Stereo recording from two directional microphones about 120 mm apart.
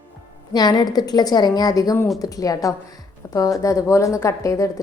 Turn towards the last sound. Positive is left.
turn(degrees=25)  # may be behind; listen again after turning